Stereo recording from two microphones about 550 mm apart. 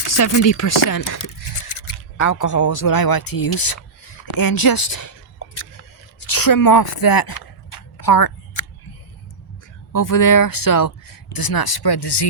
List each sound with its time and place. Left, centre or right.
0.2 s speech: left
9.9 s speech: left